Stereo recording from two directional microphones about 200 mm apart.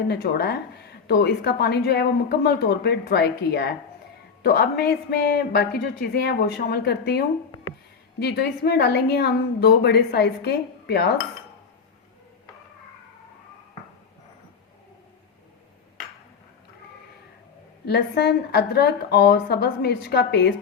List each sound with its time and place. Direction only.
0.1 s a woman's voice: 55° left (ahead or behind)
17.8 s a woman's voice: 55° left (ahead or behind)